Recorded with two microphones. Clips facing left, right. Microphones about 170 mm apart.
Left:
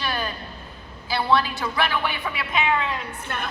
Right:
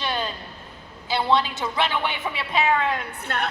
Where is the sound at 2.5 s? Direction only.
40° right (ahead or behind); by 3.4 s 65° right (ahead or behind).